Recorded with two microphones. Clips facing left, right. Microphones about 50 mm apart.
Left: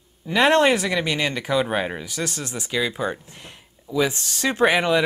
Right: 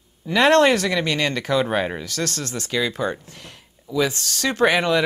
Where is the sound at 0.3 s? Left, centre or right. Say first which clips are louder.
Right 2 dB; centre.